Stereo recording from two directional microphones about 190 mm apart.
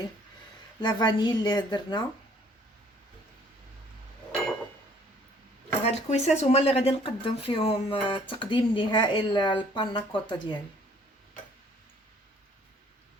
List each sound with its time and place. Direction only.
0.8 s speech: 25° left (ahead or behind)
5.8 s speech: 35° left (ahead or behind)